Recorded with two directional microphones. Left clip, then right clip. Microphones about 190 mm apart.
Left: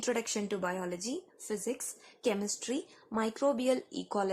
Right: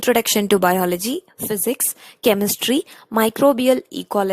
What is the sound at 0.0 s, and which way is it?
A woman's voice, 45° right (ahead or behind).